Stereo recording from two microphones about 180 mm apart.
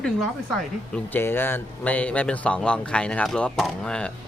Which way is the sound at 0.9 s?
10° left (ahead or behind).